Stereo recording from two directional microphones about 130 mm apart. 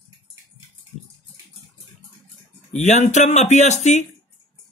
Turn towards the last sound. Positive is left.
turn(degrees=65)  # may be behind; listen again after turning